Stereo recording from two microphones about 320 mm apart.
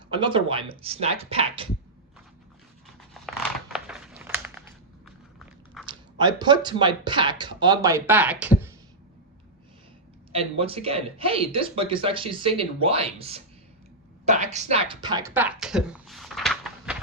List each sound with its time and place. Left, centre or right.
0.1 s speech: centre
2.8 s a sound: centre
5.8 s speech: centre
10.6 s speech: centre